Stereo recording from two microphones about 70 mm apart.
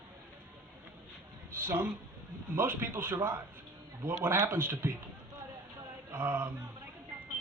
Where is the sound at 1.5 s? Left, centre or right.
Right.